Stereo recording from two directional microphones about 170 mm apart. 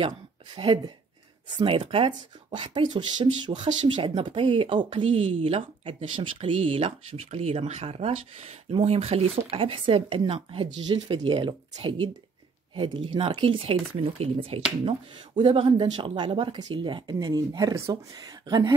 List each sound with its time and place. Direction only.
0.6 s speech: 30° right (ahead or behind)